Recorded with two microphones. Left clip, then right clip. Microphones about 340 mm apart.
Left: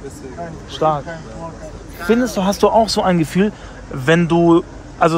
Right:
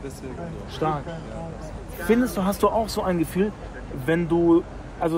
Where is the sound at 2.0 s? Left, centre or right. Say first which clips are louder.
Left 6 dB; left.